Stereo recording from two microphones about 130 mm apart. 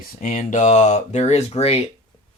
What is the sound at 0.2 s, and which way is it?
Speech, 80° left.